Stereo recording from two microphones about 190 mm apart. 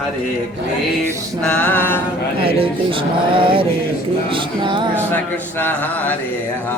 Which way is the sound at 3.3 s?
25° right (ahead or behind).